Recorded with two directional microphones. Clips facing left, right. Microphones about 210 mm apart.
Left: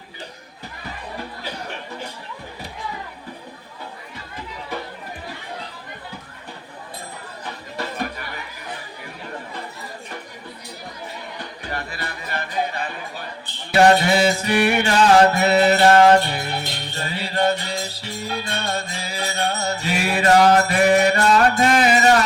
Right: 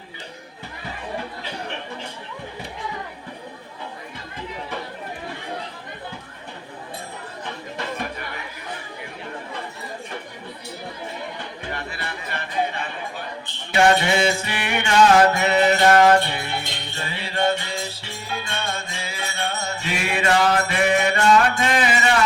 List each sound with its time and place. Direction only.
11.6 s music: 40° left (ahead or behind)